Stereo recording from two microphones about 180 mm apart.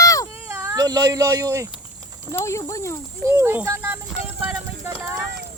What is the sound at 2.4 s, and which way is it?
Speech, 15° left (ahead or behind).